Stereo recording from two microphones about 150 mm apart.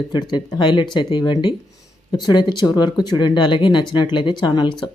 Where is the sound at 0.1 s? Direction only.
30° left (ahead or behind).